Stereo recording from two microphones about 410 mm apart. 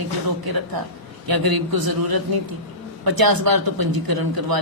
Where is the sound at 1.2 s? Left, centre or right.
Right.